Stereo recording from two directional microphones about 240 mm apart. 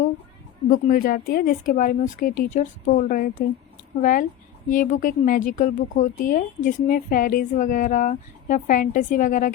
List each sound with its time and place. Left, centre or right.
0.7 s a woman's voice: left